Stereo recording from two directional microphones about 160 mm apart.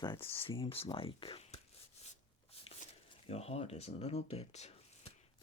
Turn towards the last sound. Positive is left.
turn(degrees=40)  # may be behind; listen again after turning